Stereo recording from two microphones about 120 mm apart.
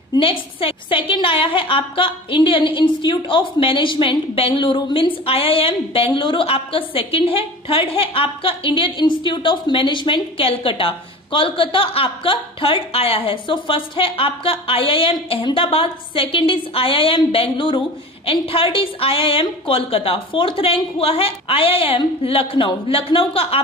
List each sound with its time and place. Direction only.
0.2 s a woman's voice: 50° left (ahead or behind)